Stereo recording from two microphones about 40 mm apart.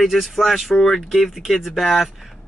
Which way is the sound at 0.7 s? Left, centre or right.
Centre.